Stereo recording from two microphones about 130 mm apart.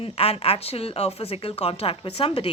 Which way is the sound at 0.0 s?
50° left (ahead or behind).